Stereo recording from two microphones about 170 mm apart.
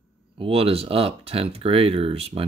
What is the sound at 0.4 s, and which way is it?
Speech, 35° right (ahead or behind).